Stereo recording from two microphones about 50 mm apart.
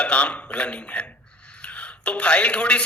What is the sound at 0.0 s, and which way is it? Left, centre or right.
A man's voice, left.